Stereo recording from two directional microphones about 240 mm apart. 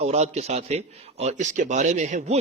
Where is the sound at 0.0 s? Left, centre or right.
Right.